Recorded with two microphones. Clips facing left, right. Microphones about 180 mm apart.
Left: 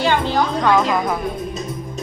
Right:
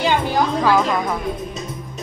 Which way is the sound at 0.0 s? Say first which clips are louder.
Left 1 dB; 15° right (ahead or behind).